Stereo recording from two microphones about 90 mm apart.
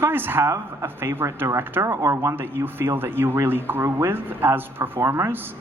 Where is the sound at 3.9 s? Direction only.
35° right (ahead or behind).